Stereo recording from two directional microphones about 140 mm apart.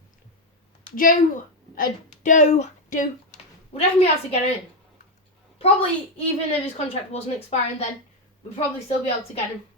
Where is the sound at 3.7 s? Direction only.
45° left (ahead or behind).